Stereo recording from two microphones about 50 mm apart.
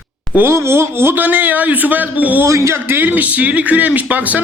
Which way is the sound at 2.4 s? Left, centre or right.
Right.